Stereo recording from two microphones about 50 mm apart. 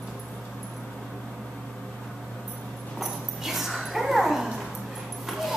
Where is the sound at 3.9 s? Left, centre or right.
Centre.